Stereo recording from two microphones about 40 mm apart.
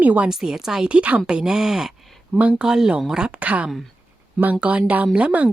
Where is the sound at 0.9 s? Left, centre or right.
Right.